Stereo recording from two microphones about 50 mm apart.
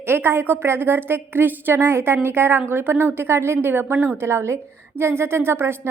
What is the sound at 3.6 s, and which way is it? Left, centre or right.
Speech, right.